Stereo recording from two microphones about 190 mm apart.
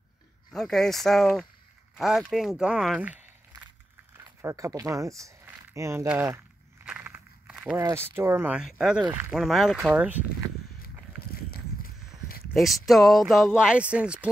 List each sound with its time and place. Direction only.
0.5 s speech: centre (ahead or behind)
4.4 s a sound: 15° right (ahead or behind)
7.8 s speech: 15° right (ahead or behind)
9.0 s speech: 15° right (ahead or behind)
9.3 s speech: centre (ahead or behind)
11.3 s a sound: 50° left (ahead or behind)
12.5 s speech: centre (ahead or behind)